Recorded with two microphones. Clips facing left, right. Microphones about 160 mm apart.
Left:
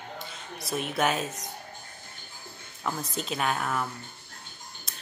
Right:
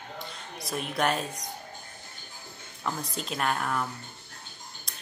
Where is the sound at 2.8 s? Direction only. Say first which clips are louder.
Left 1 dB; centre (ahead or behind).